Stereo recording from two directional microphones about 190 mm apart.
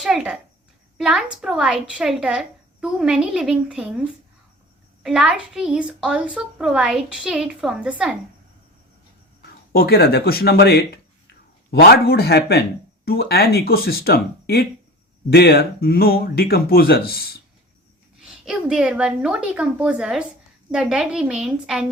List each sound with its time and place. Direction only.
0.0 s a woman's voice: 5° right (ahead or behind)
5.0 s a woman's voice: 5° right (ahead or behind)
9.7 s speech: 55° left (ahead or behind)
18.4 s a woman's voice: 5° right (ahead or behind)